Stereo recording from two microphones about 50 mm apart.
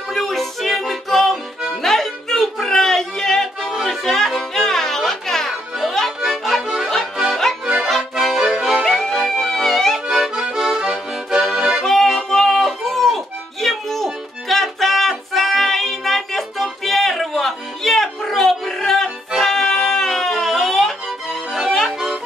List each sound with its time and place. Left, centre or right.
0.1 s music: centre
7.6 s accordion: centre
7.9 s accordion: centre
8.8 s music: centre
10.0 s accordion: centre
11.8 s music: centre
21.7 s music: centre